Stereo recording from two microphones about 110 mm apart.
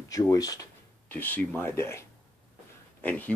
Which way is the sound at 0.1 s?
35° left (ahead or behind).